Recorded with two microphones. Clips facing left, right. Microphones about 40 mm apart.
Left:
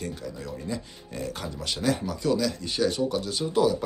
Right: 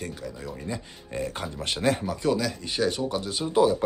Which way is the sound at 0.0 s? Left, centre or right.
Centre.